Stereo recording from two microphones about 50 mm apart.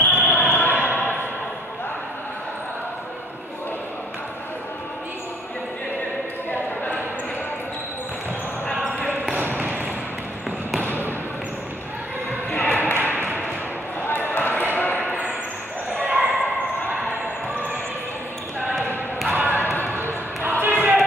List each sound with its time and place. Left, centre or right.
0.0 s basketball bounce: left
0.7 s basketball bounce: right
6.5 s a sound: left
9.4 s basketball bounce: right
12.4 s basketball bounce: left
12.8 s ping: left
13.1 s a sound: right
14.0 s basketball bounce: left
15.9 s basketball bounce: right
19.3 s basketball bounce: right
19.6 s basketball bounce: left
20.6 s a sound: right